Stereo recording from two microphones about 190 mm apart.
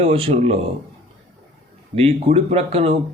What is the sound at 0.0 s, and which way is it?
Speech, 30° right (ahead or behind).